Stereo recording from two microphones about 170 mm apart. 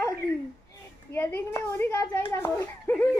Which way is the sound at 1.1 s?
15° left (ahead or behind).